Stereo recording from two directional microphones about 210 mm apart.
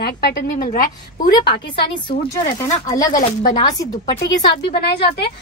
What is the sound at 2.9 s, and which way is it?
Speech, 15° left (ahead or behind).